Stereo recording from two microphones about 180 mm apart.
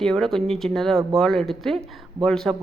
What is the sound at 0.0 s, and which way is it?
Speech, centre (ahead or behind).